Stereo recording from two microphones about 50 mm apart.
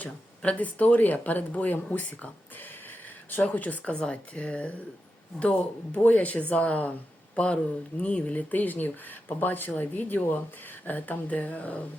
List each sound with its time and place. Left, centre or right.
0.0 s speech: left